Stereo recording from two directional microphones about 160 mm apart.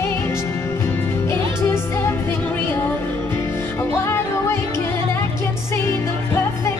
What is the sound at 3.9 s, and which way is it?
Music, 15° left (ahead or behind).